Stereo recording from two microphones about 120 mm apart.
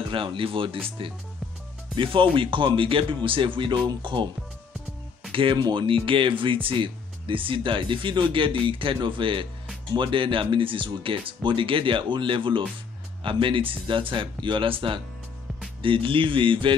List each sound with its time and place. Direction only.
0.1 s speech: 45° right (ahead or behind)
2.3 s speech: 45° right (ahead or behind)
5.3 s speech: 45° right (ahead or behind)